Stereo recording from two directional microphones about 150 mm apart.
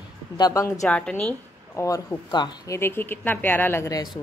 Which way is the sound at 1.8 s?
25° left (ahead or behind).